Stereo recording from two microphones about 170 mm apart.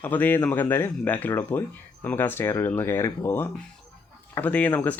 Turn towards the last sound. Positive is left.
turn(degrees=10)  # may be behind; listen again after turning